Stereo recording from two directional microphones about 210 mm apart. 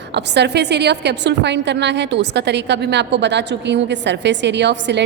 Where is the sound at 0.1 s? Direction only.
55° right (ahead or behind).